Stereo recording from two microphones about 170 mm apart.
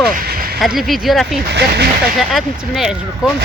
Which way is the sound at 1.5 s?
80° right.